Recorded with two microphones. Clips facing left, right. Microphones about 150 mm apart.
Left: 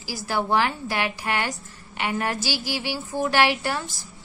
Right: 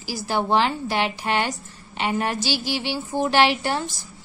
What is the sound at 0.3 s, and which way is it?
A woman's voice, 20° right (ahead or behind).